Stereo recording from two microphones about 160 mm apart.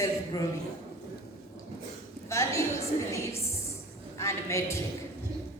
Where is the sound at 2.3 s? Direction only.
20° left (ahead or behind).